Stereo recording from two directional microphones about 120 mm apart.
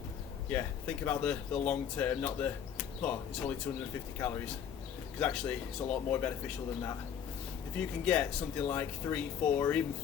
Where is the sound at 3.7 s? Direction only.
20° left (ahead or behind).